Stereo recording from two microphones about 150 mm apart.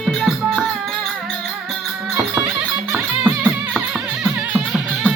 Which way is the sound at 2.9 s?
5° right (ahead or behind).